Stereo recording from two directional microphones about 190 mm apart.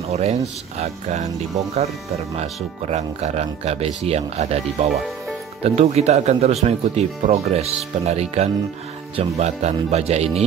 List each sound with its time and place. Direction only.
0.1 s speech: 35° right (ahead or behind)
2.3 s speech: 35° right (ahead or behind)